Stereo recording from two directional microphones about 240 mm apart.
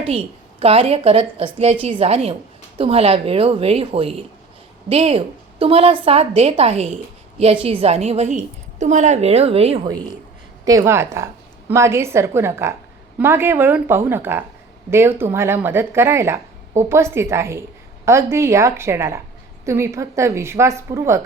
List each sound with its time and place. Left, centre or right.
0.0 s a woman's voice: right